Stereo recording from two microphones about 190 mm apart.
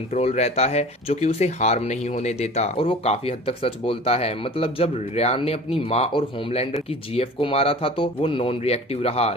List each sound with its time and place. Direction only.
0.1 s speech: 35° left (ahead or behind)